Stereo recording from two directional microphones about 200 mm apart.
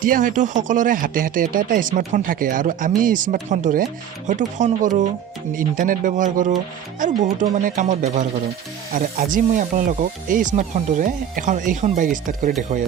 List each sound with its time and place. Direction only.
0.0 s speech: 45° right (ahead or behind)